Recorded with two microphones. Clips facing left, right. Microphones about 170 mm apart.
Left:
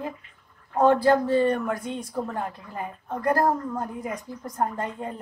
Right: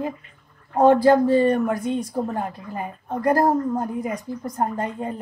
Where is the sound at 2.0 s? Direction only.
35° right (ahead or behind).